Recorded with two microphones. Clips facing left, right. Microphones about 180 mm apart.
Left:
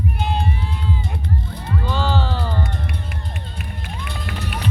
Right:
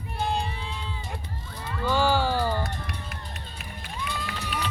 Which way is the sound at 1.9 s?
10° right (ahead or behind).